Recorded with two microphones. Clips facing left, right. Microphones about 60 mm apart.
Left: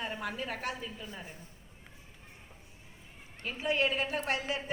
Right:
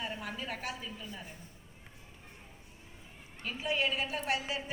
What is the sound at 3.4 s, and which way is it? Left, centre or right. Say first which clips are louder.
A woman's voice: left 2 dB; left.